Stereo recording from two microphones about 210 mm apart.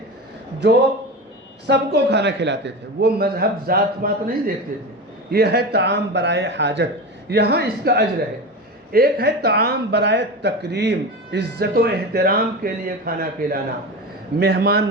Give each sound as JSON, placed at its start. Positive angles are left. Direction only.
{"t": 1.6, "sound": "speech", "side_deg": -55}